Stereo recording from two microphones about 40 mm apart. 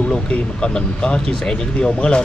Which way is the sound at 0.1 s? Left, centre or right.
Left.